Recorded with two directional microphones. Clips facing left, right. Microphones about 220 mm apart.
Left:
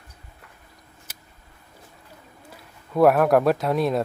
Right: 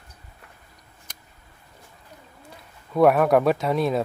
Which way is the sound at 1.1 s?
5° left (ahead or behind).